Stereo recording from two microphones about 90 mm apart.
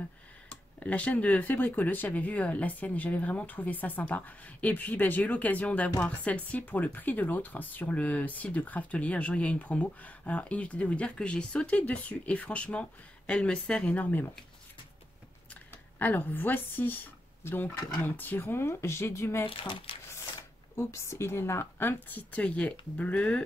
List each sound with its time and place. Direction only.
0.7 s speech: 15° left (ahead or behind)
16.0 s speech: 20° left (ahead or behind)
19.4 s speech: 75° left (ahead or behind)
20.7 s speech: 30° left (ahead or behind); by 23.4 s 15° left (ahead or behind)